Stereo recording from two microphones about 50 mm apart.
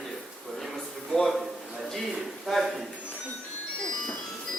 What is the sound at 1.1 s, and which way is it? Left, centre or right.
Speech, centre.